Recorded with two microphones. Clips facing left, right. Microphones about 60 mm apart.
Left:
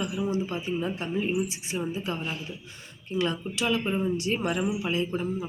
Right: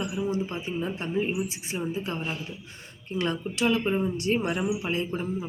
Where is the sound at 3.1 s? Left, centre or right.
Right.